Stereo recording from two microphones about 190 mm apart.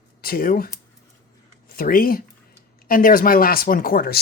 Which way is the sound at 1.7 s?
50° left (ahead or behind).